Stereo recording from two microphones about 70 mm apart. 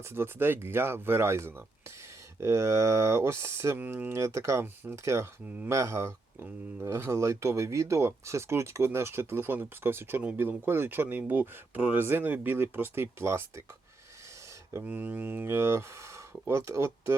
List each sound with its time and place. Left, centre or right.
0.1 s speech: right
3.8 s speech: right
4.1 s speech: right
14.8 s speech: right